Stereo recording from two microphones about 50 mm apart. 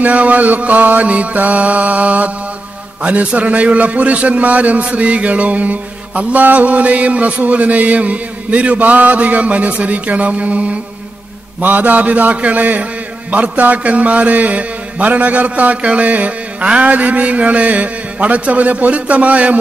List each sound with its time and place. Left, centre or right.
0.0 s a man's voice: right
11.6 s mantra: right
13.3 s a man's voice: right